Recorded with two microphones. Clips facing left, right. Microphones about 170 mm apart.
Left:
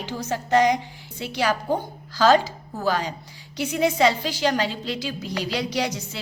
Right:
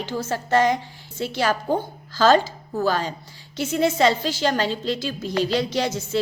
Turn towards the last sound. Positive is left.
turn(degrees=15)  # may be behind; listen again after turning